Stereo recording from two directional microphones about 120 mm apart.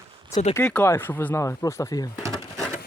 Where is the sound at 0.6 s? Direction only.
10° left (ahead or behind); by 2.0 s 30° left (ahead or behind).